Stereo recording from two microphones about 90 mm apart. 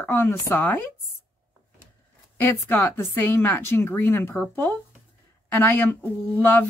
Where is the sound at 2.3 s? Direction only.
20° left (ahead or behind).